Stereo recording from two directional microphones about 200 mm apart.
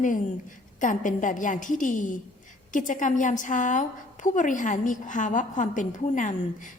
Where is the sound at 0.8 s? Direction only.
40° left (ahead or behind).